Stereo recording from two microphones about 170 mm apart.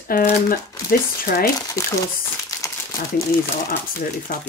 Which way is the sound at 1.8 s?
20° left (ahead or behind).